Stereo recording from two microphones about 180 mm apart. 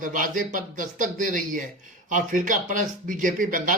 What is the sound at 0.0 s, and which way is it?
Speech, 45° right (ahead or behind).